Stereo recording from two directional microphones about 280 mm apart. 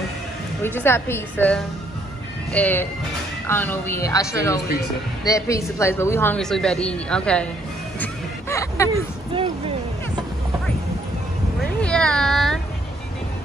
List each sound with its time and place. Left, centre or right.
0.6 s a woman's voice: centre
8.0 s music: centre
9.3 s music: centre
11.8 s a man's voice: centre